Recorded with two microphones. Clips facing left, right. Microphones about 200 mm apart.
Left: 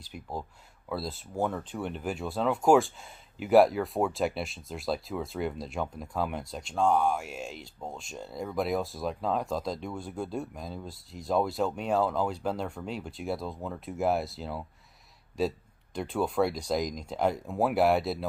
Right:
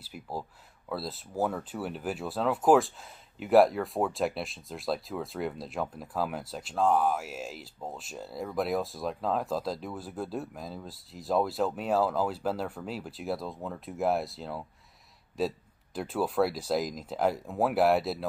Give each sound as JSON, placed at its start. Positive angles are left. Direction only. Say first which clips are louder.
{"t": 0.0, "sound": "speech", "louder": "even", "side_deg": -5}